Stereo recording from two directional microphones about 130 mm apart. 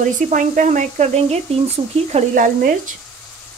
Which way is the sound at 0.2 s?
80° right.